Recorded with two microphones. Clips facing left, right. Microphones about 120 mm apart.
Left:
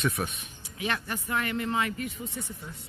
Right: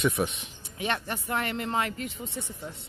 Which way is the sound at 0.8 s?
35° right (ahead or behind).